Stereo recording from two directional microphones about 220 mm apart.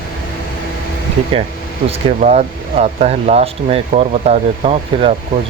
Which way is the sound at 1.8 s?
30° right (ahead or behind).